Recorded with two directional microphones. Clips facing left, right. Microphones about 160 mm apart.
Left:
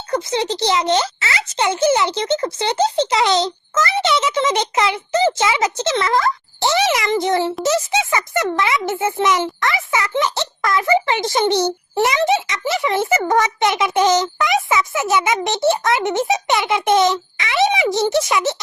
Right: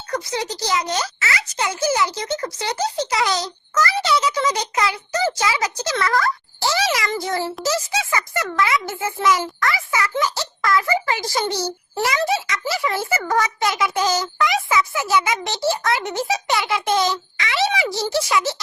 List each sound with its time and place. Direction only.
0.1 s a child's voice: 25° left (ahead or behind)